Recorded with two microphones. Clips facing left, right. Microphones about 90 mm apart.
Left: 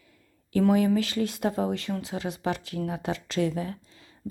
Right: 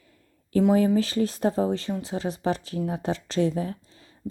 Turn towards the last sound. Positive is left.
turn(degrees=-35)  # may be behind; listen again after turning